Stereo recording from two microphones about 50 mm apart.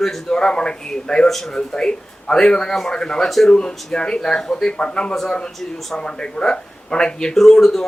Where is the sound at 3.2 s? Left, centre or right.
Centre.